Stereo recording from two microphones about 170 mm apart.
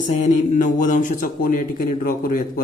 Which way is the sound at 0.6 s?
50° left (ahead or behind).